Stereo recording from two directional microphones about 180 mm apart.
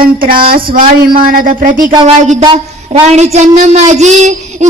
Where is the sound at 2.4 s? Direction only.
30° right (ahead or behind).